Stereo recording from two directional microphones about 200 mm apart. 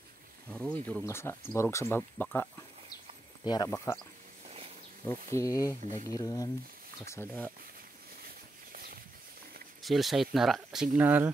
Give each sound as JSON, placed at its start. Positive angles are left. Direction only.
{"t": 0.7, "sound": "speech", "side_deg": 5}
{"t": 3.4, "sound": "speech", "side_deg": 20}
{"t": 5.0, "sound": "speech", "side_deg": 15}
{"t": 8.7, "sound": "a sound", "side_deg": -50}
{"t": 9.8, "sound": "speech", "side_deg": 0}